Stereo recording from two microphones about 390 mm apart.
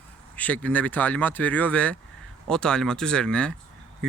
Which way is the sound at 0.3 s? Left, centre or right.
Centre.